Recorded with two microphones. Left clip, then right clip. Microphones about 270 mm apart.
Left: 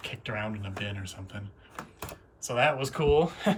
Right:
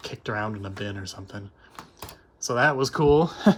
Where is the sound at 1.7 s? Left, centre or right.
Centre.